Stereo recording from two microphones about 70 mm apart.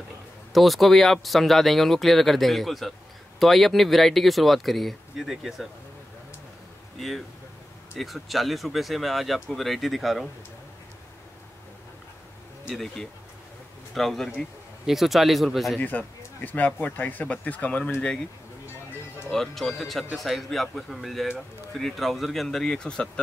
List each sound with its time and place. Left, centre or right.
0.5 s speech: centre
7.0 s speech: centre
12.7 s speech: centre
15.8 s speech: left
19.3 s speech: centre